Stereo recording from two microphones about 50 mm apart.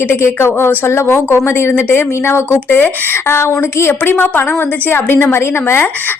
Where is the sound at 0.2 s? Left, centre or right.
Left.